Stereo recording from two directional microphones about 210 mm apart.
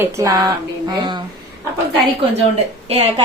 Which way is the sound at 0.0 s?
15° right (ahead or behind).